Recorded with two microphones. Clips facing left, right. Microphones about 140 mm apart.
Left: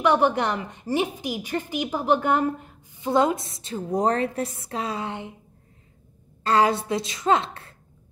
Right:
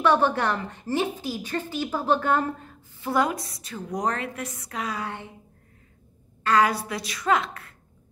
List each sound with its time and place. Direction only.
0.0 s a woman's voice: 15° left (ahead or behind)
6.4 s a woman's voice: 30° left (ahead or behind)